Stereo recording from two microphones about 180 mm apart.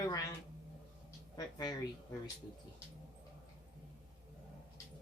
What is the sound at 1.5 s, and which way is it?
Speech, 20° left (ahead or behind).